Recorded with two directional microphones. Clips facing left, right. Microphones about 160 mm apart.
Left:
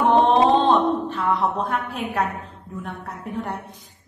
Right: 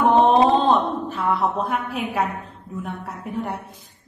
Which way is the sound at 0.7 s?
10° right (ahead or behind).